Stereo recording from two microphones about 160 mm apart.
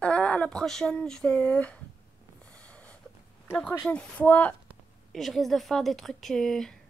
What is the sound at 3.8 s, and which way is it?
A woman's voice, 5° left (ahead or behind).